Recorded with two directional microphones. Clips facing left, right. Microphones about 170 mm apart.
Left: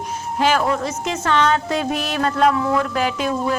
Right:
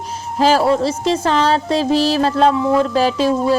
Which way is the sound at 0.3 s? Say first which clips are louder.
Right 5 dB; 35° right (ahead or behind).